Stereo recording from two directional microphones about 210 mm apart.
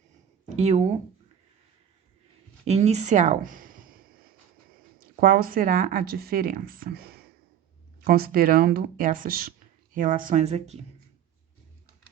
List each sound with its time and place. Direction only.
0.5 s speech: 30° right (ahead or behind)
2.6 s speech: 30° right (ahead or behind)
4.9 s speech: 45° right (ahead or behind)